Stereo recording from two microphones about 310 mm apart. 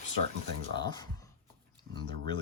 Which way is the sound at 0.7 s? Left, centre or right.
Centre.